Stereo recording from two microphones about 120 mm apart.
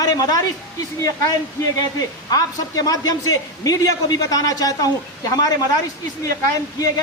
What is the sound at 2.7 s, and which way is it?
A man's voice, 30° left (ahead or behind).